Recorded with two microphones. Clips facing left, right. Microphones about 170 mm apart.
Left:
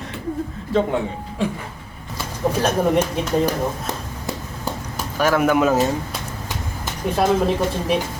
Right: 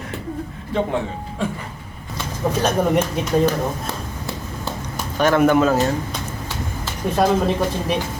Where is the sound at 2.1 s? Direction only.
5° left (ahead or behind).